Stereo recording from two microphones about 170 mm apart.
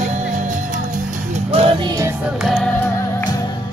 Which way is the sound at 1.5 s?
30° right (ahead or behind).